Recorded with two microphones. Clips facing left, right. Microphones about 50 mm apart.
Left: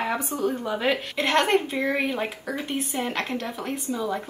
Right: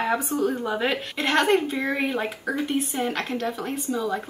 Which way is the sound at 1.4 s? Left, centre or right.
Left.